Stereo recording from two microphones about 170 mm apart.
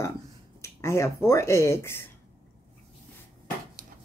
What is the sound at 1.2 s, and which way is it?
Speech, 15° left (ahead or behind).